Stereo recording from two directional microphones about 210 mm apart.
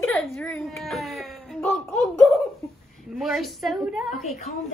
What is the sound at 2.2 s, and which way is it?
Giggle, 15° left (ahead or behind).